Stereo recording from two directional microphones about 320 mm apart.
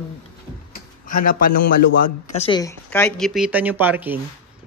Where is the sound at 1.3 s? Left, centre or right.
Left.